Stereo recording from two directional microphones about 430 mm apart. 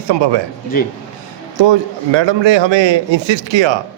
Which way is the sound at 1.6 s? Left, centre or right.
Right.